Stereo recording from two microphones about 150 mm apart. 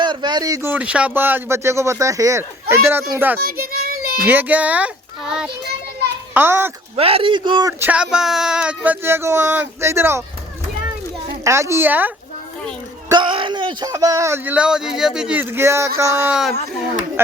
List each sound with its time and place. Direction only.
0.0 s speech: 30° right (ahead or behind)
3.4 s child singing: 75° right (ahead or behind)
4.3 s a child's voice: 10° right (ahead or behind)
6.9 s speech: 40° right (ahead or behind)
7.7 s speech: 10° right (ahead or behind)
11.4 s speech: 20° right (ahead or behind)
13.1 s a sound: 30° right (ahead or behind)
13.9 s speech: 20° right (ahead or behind)